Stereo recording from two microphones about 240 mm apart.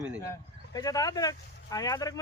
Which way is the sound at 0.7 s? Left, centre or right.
Centre.